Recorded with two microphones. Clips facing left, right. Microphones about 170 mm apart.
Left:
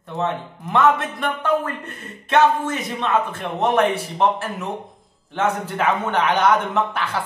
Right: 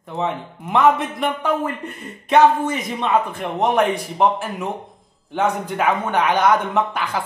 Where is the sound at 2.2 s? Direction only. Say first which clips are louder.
Right 3 dB; 15° right (ahead or behind).